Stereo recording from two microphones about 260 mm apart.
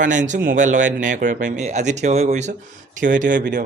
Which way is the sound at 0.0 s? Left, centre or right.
Right.